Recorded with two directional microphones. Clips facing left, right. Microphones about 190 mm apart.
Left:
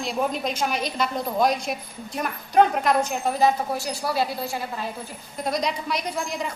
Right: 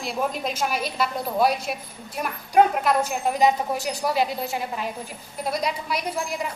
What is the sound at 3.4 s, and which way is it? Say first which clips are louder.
A woman's voice: right 1 dB; 15° right (ahead or behind).